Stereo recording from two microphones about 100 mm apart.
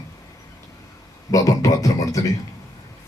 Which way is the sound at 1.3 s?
35° left (ahead or behind).